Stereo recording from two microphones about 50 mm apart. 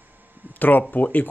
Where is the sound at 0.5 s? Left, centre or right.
Left.